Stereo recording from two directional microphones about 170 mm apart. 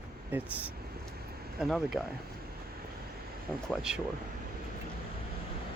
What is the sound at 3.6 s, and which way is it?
Speech, 5° right (ahead or behind).